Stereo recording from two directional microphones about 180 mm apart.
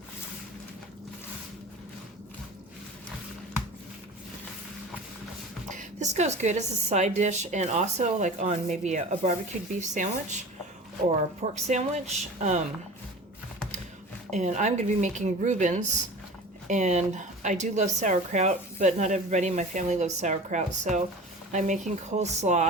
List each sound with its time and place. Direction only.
5.7 s speech: 40° right (ahead or behind)
14.3 s speech: 40° right (ahead or behind)